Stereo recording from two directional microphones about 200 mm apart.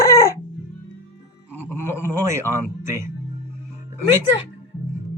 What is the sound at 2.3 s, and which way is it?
Speech, 15° right (ahead or behind).